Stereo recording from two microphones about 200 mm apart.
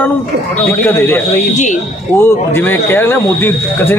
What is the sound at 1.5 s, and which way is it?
Speech, 35° left (ahead or behind).